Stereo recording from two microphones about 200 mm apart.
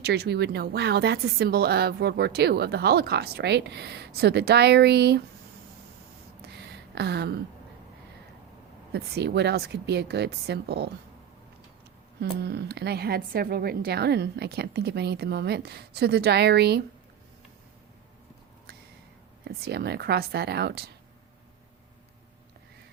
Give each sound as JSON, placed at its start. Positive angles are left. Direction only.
{"t": 0.0, "sound": "a woman's voice", "side_deg": -55}
{"t": 6.6, "sound": "a sound", "side_deg": -55}
{"t": 8.9, "sound": "a woman's voice", "side_deg": -55}
{"t": 12.2, "sound": "a woman's voice", "side_deg": -55}
{"t": 19.5, "sound": "speech", "side_deg": -50}